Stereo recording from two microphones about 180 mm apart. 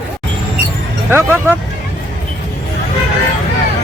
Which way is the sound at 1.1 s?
10° right (ahead or behind).